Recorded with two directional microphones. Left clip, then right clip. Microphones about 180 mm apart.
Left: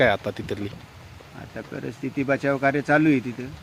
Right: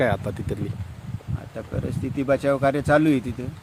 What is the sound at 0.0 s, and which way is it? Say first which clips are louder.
Speech: left 3 dB; 10° right (ahead or behind).